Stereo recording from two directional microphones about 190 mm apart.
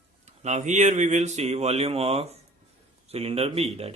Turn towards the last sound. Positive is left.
turn(degrees=-30)  # may be behind; listen again after turning